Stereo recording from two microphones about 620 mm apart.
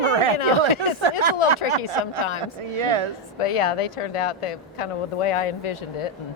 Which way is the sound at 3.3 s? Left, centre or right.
Left.